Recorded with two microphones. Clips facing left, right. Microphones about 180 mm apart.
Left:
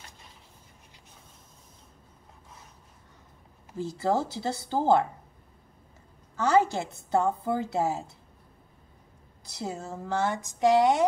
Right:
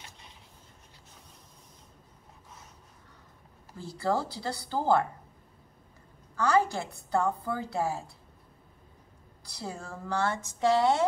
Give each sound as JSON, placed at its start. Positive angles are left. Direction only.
{"t": 3.7, "sound": "a woman's voice", "side_deg": 20}
{"t": 6.3, "sound": "a woman's voice", "side_deg": 20}
{"t": 9.4, "sound": "speech", "side_deg": 20}